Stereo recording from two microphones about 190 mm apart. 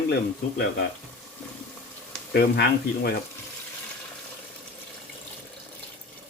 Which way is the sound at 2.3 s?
55° left (ahead or behind).